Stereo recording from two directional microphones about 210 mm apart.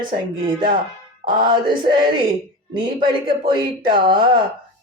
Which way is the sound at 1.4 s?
20° right (ahead or behind).